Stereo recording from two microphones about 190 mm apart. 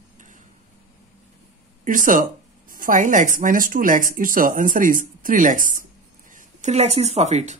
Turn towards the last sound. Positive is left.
turn(degrees=-40)  # may be behind; listen again after turning